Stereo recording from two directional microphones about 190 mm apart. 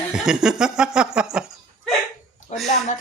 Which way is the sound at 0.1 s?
5° right (ahead or behind).